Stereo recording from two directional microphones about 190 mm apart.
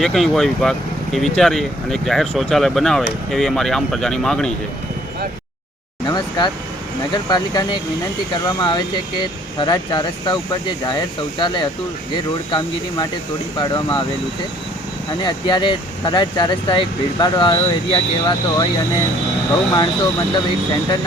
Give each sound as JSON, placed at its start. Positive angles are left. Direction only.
{"t": 0.0, "sound": "speech", "side_deg": 0}
{"t": 6.1, "sound": "vehicle", "side_deg": 20}
{"t": 7.1, "sound": "speech", "side_deg": 20}
{"t": 15.2, "sound": "speech", "side_deg": 25}